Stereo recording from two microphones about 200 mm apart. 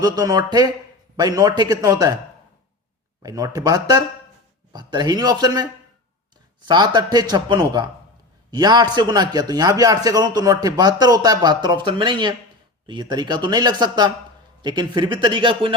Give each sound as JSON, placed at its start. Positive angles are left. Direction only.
{"t": 0.0, "sound": "a man's voice", "side_deg": -20}
{"t": 3.2, "sound": "a man's voice", "side_deg": -15}
{"t": 6.7, "sound": "a man's voice", "side_deg": -20}